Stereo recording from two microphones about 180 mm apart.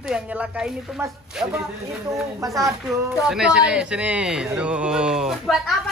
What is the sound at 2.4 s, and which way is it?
Speech, 15° right (ahead or behind).